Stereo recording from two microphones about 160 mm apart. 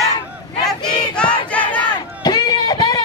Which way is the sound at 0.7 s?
5° left (ahead or behind).